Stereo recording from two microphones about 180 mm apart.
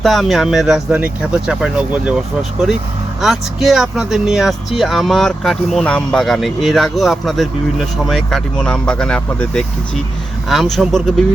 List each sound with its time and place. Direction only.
0.0 s speech: centre (ahead or behind)